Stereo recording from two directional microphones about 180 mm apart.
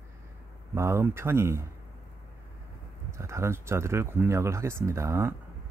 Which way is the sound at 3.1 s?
15° right (ahead or behind).